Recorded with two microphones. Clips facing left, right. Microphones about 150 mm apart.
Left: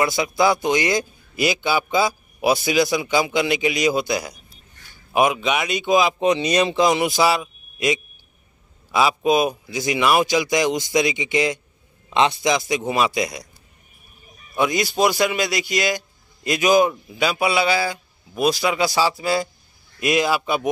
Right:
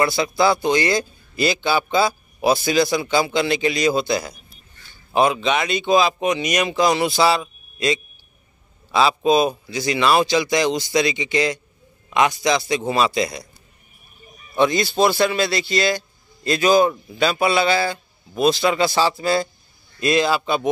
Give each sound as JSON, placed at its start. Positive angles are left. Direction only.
{"t": 0.0, "sound": "a man's voice", "side_deg": 15}
{"t": 6.2, "sound": "a man's voice", "side_deg": 30}
{"t": 14.6, "sound": "a man's voice", "side_deg": 10}